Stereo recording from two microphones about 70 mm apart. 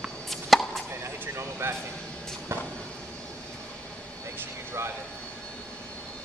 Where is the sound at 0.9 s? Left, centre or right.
Right.